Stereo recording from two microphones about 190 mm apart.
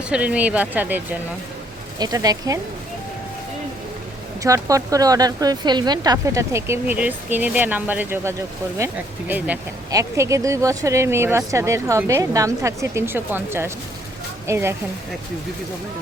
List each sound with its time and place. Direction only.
0.1 s speech: 5° right (ahead or behind)
4.4 s speech: 15° right (ahead or behind)